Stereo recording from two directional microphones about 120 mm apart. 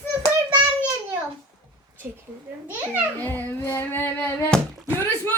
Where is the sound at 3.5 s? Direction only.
15° left (ahead or behind).